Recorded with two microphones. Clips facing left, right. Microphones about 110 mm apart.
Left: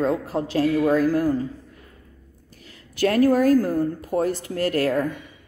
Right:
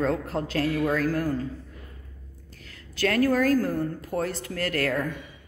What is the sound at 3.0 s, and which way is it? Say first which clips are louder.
Speech: left 5 dB; 20° left (ahead or behind).